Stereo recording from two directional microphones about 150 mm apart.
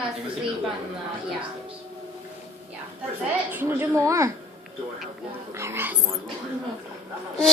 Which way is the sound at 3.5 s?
15° right (ahead or behind).